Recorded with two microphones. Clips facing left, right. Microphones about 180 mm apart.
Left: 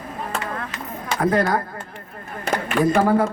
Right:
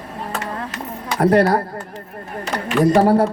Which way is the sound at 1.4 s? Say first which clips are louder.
Right 5 dB; 40° right (ahead or behind).